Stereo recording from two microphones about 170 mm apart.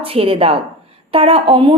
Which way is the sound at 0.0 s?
35° right (ahead or behind).